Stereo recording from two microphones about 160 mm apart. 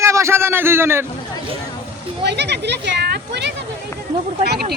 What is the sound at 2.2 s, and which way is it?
Speech, 90° right.